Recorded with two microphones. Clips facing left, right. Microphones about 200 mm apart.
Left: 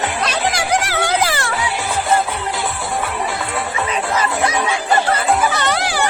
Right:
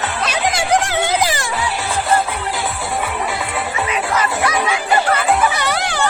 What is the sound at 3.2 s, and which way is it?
Music, centre (ahead or behind).